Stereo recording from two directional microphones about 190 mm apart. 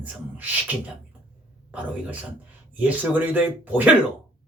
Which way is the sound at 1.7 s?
5° right (ahead or behind).